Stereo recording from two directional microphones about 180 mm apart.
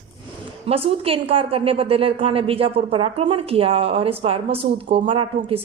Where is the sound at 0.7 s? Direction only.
30° right (ahead or behind).